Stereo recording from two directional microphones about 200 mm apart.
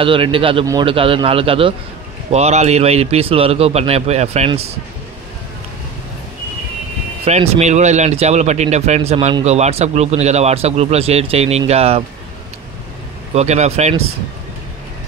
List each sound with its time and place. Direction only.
0.0 s a man's voice: 25° right (ahead or behind)
7.2 s speech: 35° right (ahead or behind)
13.3 s speech: 35° right (ahead or behind)